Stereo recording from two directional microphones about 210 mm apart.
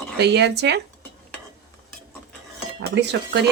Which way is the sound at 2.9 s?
55° right (ahead or behind).